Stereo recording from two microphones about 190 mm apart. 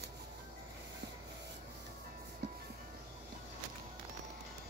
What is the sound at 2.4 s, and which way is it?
Music, 65° right (ahead or behind).